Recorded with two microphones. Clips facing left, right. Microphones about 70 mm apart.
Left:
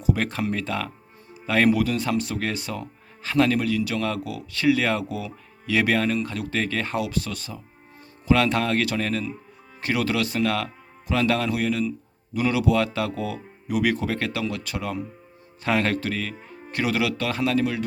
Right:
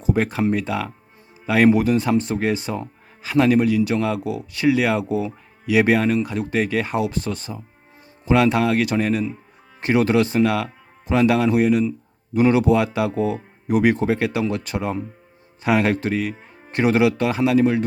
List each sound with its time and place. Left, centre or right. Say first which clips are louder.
0.2 s a man's voice: right 6 dB; centre
1.7 s speech: right 5 dB; right
3.2 s a man's voice: right 4 dB; centre
5.0 s speech: right 8 dB; right
5.6 s a man's voice: right 5 dB; centre
7.0 s a man's voice: right 4 dB; right
9.8 s speech: right 7 dB; right
10.4 s a man's voice: right 4 dB; centre; by 12.7 s right
12.7 s a man's voice: right 4 dB; centre
13.1 s speech: right 7 dB; right
15.6 s a man's voice: right 4 dB; centre